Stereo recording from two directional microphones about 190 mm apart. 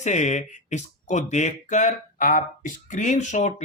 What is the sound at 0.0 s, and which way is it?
Speech, 40° left (ahead or behind).